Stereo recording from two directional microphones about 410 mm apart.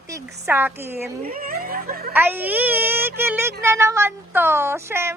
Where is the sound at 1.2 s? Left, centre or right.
Right.